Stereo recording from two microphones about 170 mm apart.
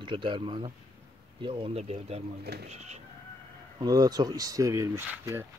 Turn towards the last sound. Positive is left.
turn(degrees=-15)  # may be behind; listen again after turning